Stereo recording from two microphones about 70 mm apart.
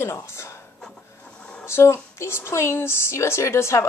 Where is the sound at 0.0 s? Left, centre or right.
Left.